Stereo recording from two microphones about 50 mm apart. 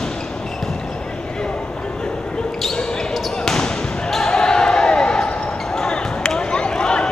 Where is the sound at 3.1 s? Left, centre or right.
Centre.